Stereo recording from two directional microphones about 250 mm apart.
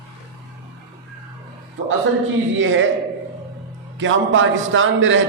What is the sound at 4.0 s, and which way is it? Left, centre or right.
A man's voice, right.